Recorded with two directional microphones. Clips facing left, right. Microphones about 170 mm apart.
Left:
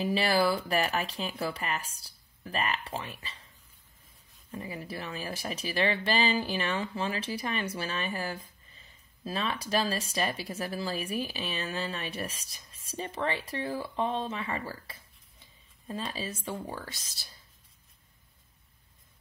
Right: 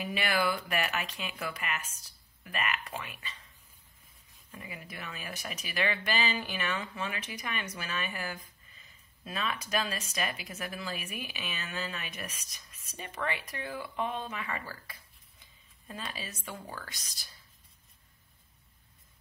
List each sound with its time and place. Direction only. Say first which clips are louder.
0.0 s speech: left 5 dB; 30° left (ahead or behind)
4.5 s speech: left 7 dB; 35° left (ahead or behind)
16.1 s speech: left 6 dB; 30° left (ahead or behind)